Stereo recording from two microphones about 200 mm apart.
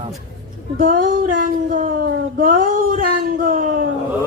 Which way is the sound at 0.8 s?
40° right (ahead or behind).